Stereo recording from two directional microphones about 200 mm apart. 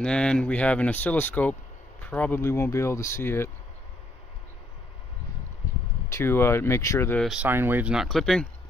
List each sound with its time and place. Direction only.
0.0 s speech: 5° left (ahead or behind)
6.0 s speech: 15° left (ahead or behind)
7.2 s speech: 10° right (ahead or behind)